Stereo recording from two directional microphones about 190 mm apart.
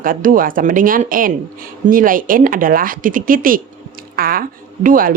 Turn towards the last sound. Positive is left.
turn(degrees=-45)  # may be behind; listen again after turning